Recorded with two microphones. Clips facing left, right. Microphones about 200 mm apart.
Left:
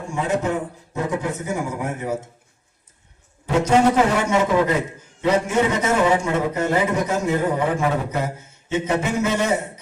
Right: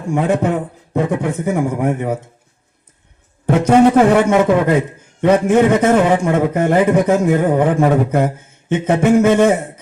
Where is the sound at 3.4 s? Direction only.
55° right (ahead or behind).